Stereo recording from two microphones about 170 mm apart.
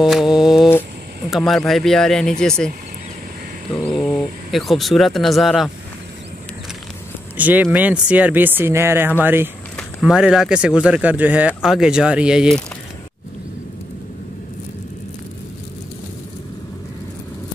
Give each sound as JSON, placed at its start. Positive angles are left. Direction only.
{"t": 0.0, "sound": "mantra", "side_deg": 0}
{"t": 1.3, "sound": "speech", "side_deg": 0}
{"t": 3.7, "sound": "speech", "side_deg": 5}
{"t": 7.3, "sound": "speech", "side_deg": -10}
{"t": 9.8, "sound": "a sound", "side_deg": 5}
{"t": 10.1, "sound": "speech", "side_deg": -5}